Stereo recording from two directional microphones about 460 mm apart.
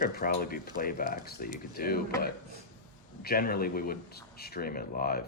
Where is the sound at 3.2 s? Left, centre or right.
Centre.